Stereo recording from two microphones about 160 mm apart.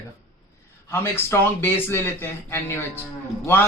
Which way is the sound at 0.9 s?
15° left (ahead or behind).